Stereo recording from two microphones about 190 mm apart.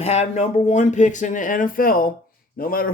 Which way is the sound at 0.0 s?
35° left (ahead or behind).